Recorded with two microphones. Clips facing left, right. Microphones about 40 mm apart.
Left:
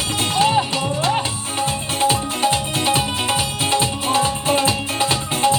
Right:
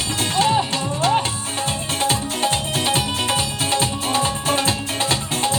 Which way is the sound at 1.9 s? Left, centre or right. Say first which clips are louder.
Left 3 dB; centre.